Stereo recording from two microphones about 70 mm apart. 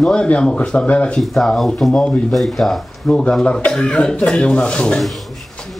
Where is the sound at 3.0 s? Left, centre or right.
Centre.